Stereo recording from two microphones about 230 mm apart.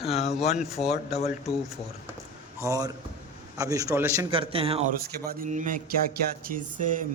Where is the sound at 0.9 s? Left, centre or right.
Left.